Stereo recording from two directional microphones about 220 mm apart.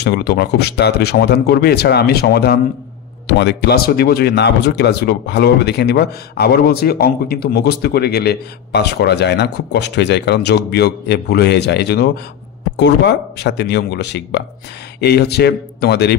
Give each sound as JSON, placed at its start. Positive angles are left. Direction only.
{"t": 0.0, "sound": "speech", "side_deg": 45}